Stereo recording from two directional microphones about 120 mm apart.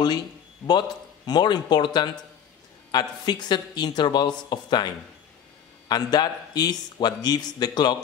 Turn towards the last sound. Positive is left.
turn(degrees=35)  # may be behind; listen again after turning